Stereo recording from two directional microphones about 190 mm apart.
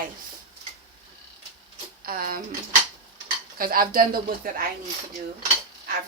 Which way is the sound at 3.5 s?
50° right (ahead or behind).